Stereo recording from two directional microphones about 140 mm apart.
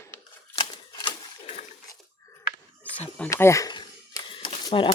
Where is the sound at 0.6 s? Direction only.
35° left (ahead or behind).